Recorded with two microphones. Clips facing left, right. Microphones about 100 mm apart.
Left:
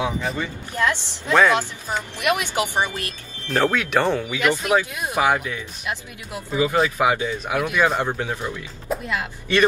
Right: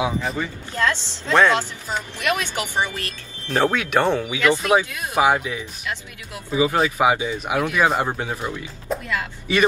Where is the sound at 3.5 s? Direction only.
10° right (ahead or behind).